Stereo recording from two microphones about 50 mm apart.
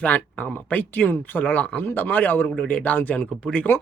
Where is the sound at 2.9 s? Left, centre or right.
Left.